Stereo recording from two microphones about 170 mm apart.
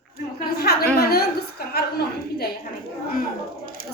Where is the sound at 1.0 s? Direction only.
65° left (ahead or behind).